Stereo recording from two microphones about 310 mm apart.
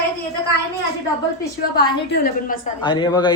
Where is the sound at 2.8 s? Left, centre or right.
Centre.